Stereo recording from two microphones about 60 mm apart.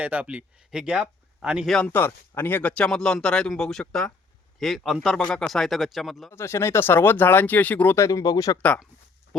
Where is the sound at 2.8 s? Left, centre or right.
Centre.